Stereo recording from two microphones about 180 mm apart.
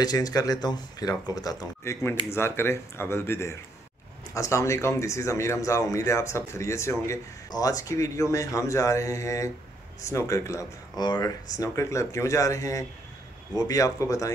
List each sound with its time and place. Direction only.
0.0 s speech: 20° left (ahead or behind)